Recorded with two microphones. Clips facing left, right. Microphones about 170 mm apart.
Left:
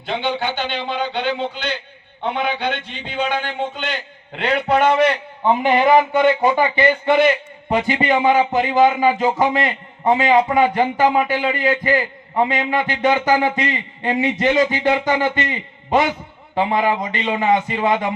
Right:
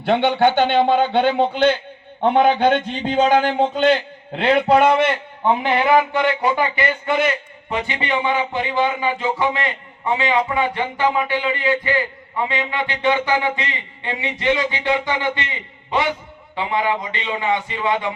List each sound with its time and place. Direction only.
0.0 s a man's voice: 65° right (ahead or behind); by 4.8 s 30° right (ahead or behind)
5.5 s a man's voice: 15° left (ahead or behind); by 18.1 s 45° left (ahead or behind)